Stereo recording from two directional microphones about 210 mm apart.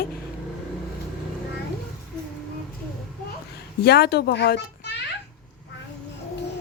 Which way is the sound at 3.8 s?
50° left (ahead or behind).